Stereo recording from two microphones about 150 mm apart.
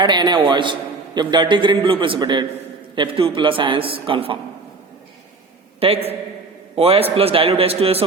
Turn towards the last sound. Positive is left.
turn(degrees=-40)  # may be behind; listen again after turning